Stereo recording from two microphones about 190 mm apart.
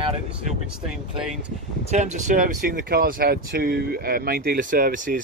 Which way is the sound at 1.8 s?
40° right (ahead or behind).